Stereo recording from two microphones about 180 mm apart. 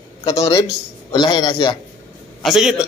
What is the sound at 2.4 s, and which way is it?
Speech, 5° right (ahead or behind).